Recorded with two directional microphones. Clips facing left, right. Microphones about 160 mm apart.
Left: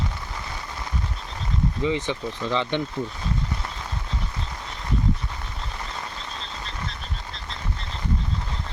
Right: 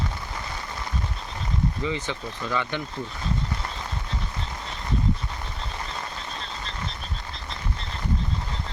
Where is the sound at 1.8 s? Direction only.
20° left (ahead or behind).